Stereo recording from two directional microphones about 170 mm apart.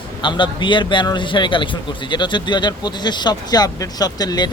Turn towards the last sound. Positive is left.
turn(degrees=25)  # may be behind; listen again after turning